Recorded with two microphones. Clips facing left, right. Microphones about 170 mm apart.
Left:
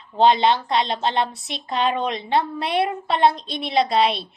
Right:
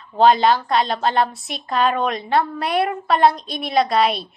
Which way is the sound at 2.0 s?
50° right (ahead or behind).